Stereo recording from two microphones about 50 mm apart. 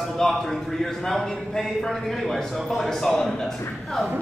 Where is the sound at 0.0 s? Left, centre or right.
Centre.